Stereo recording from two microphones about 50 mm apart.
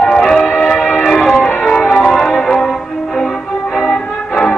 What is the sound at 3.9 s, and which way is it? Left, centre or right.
Music, centre.